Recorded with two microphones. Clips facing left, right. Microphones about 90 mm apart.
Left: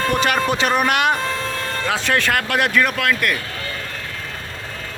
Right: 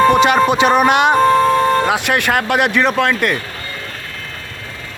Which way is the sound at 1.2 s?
55° right (ahead or behind).